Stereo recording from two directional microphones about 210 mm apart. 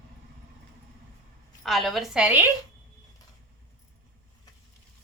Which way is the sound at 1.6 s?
Centre (ahead or behind).